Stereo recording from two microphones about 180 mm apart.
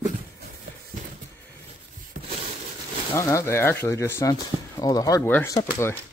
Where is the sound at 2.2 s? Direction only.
45° right (ahead or behind).